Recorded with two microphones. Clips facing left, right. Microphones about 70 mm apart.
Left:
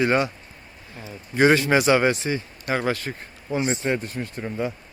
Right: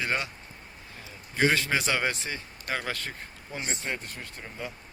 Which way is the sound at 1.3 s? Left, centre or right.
Left.